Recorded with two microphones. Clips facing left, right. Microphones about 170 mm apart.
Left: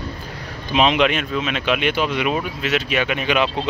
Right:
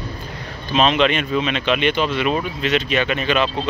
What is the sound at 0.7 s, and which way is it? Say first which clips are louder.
Speech: even; 15° left (ahead or behind).